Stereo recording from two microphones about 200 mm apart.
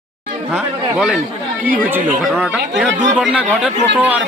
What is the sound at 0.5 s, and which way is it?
Speech, 5° right (ahead or behind).